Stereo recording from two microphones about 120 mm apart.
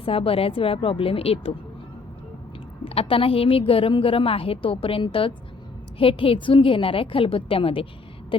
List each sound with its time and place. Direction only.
0.0 s a woman's voice: 50° left (ahead or behind)
2.8 s a woman's voice: 55° left (ahead or behind)